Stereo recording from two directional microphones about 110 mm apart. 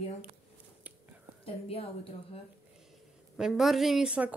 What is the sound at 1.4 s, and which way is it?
Speech, 60° left (ahead or behind).